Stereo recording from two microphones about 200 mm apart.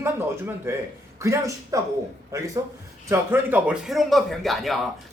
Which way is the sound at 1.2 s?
15° right (ahead or behind).